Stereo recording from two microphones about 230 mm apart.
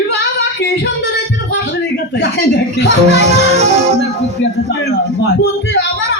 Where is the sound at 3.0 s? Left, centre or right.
Right.